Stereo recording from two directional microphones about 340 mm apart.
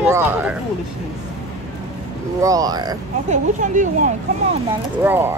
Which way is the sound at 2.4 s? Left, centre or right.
Centre.